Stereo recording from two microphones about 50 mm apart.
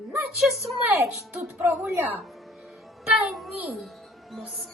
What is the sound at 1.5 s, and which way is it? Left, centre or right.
Speech, right.